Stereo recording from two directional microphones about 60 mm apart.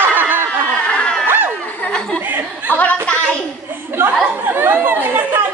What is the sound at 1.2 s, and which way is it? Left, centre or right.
Chatter, right.